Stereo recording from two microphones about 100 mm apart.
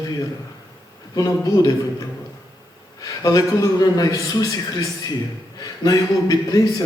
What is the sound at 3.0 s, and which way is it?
A man's voice, 35° left (ahead or behind).